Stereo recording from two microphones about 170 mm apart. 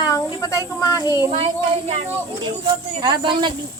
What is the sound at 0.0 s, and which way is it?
Speech, 20° left (ahead or behind).